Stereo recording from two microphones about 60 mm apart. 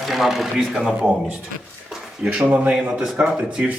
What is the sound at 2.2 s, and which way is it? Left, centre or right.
Speech, centre.